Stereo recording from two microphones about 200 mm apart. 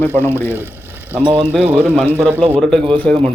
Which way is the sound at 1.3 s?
10° right (ahead or behind).